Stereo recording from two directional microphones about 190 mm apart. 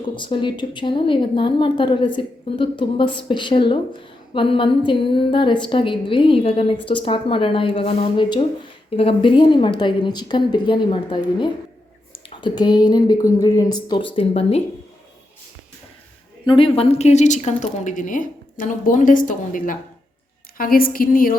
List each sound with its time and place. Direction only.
0.0 s a woman's voice: 25° left (ahead or behind)
16.5 s a woman's voice: 30° left (ahead or behind); by 21.3 s 50° left (ahead or behind)